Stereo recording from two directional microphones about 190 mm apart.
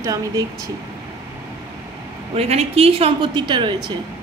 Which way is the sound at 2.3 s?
30° right (ahead or behind).